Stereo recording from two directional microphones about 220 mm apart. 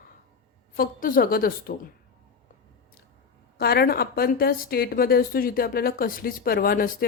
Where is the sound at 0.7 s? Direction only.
40° left (ahead or behind).